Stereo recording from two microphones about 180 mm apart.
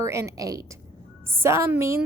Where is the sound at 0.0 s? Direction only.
15° right (ahead or behind).